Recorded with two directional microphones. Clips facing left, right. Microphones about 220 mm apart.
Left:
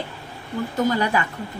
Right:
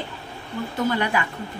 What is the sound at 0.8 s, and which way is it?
Speech, 40° left (ahead or behind).